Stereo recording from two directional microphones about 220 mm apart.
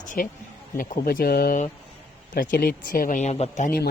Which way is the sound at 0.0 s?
35° left (ahead or behind).